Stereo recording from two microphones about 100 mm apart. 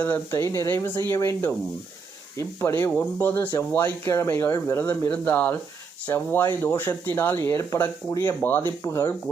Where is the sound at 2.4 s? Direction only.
30° left (ahead or behind).